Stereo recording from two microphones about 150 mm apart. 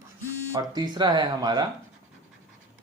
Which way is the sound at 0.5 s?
30° right (ahead or behind).